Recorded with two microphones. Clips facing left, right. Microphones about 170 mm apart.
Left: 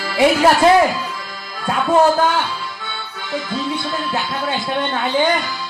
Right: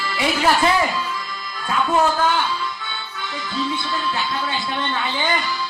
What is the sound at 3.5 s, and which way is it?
A woman's voice, 45° left (ahead or behind).